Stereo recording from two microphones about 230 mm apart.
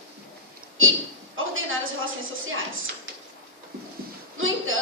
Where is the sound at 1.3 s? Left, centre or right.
Right.